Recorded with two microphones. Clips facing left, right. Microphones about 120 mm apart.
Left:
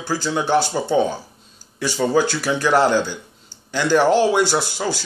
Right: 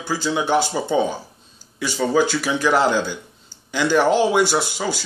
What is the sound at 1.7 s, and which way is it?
Speech, 5° right (ahead or behind).